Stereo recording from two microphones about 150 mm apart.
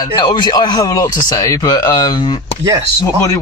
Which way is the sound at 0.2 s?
30° left (ahead or behind).